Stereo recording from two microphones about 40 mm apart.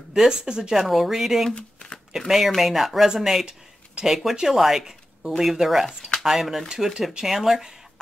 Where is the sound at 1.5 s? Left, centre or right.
Left.